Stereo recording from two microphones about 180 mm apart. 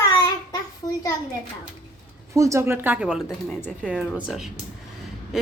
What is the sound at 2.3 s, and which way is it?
A woman's voice, 15° right (ahead or behind).